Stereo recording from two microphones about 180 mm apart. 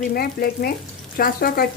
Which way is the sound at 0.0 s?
55° left (ahead or behind).